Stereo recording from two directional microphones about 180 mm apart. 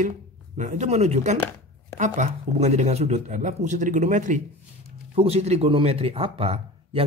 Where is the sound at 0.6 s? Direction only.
40° right (ahead or behind).